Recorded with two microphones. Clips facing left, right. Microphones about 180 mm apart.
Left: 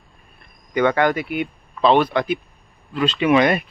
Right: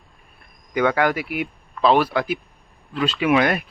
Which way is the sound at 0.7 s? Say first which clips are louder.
Left 2 dB; 5° right (ahead or behind).